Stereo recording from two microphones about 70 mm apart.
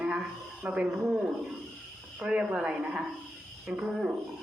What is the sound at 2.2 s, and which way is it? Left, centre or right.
A woman's voice, centre.